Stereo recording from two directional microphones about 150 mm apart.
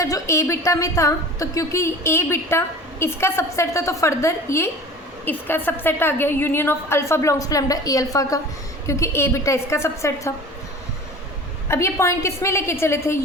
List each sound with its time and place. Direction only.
0.0 s a woman's voice: 20° left (ahead or behind)
11.7 s a woman's voice: 20° left (ahead or behind)